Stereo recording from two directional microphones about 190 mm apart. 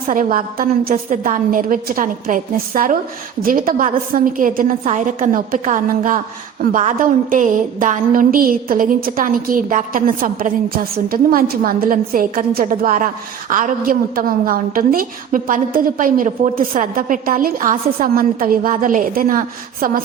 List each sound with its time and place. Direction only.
0.1 s a woman's voice: 45° right (ahead or behind)